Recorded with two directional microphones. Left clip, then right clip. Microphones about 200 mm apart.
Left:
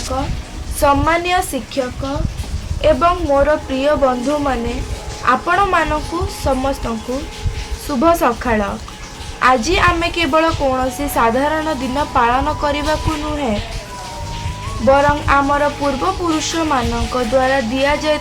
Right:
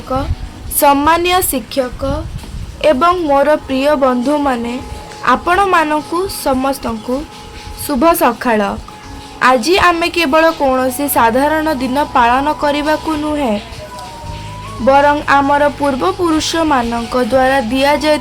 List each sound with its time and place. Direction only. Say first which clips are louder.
0.1 s a woman's voice: right 6 dB; 60° right (ahead or behind)
2.8 s a woman's voice: right 3 dB; 50° right (ahead or behind)
14.8 s a woman's voice: right 3 dB; 40° right (ahead or behind)